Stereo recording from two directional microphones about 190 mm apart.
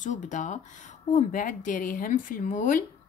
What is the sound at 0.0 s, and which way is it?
A woman's voice, 40° left (ahead or behind).